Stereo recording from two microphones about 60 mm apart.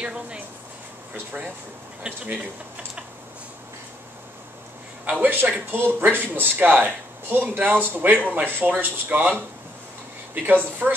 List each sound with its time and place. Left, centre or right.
0.0 s speech: centre
2.0 s speech: right
5.2 s speech: right